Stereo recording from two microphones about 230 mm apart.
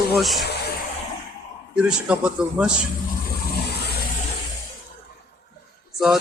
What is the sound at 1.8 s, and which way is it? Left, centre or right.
Speech, centre.